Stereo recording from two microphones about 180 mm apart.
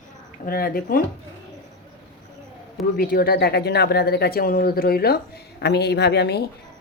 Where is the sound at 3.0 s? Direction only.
55° left (ahead or behind).